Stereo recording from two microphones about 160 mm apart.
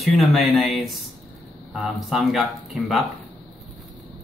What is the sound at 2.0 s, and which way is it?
Speech, centre (ahead or behind).